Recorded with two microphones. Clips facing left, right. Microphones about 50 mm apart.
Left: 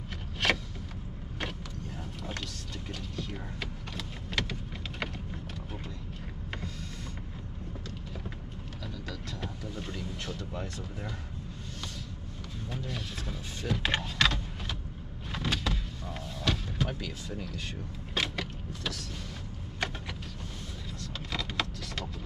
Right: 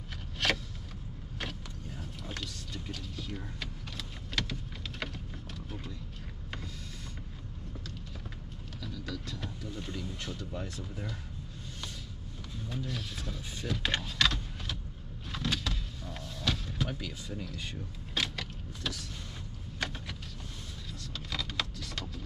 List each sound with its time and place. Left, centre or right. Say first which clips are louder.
0.4 s vehicle: left 2 dB; centre
8.8 s vehicle: right 1 dB; centre
9.9 s a sound: left 1 dB; centre
12.6 s vehicle: even; centre
15.3 s power windows: left 2 dB; centre
18.1 s vehicle: left 2 dB; centre
21.0 s vehicle: left 2 dB; centre